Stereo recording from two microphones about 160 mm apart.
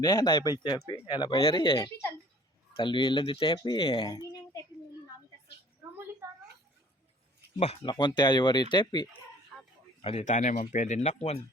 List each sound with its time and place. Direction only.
0.0 s speech: 20° left (ahead or behind)
1.8 s speech: 15° left (ahead or behind)
2.7 s speech: 30° left (ahead or behind)
7.6 s speech: 40° left (ahead or behind)
10.2 s speech: 50° left (ahead or behind)